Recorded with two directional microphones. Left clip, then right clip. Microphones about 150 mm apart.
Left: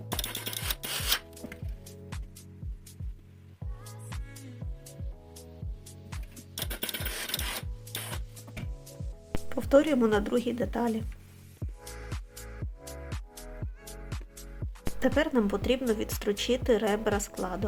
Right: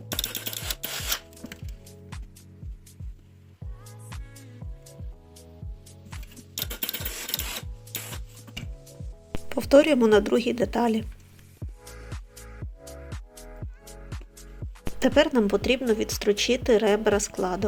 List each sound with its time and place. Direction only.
0.1 s music: 10° right (ahead or behind)
4.1 s music: centre (ahead or behind)
6.1 s music: centre (ahead or behind)
9.5 s speech: 25° right (ahead or behind)
11.6 s music: centre (ahead or behind)
14.9 s speech: 25° right (ahead or behind)